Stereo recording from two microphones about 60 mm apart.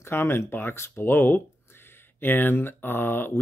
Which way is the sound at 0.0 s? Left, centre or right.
Left.